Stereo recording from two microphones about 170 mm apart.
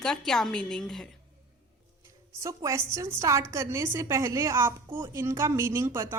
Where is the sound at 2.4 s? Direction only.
20° right (ahead or behind).